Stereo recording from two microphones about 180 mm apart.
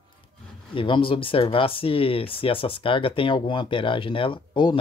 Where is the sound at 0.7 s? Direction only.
30° left (ahead or behind).